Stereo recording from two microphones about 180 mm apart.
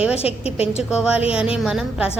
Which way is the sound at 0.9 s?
5° right (ahead or behind).